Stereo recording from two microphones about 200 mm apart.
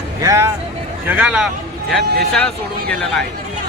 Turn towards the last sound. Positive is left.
turn(degrees=5)  # may be behind; listen again after turning